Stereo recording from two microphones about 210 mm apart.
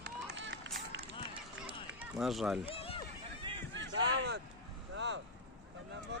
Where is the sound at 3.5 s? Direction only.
20° right (ahead or behind).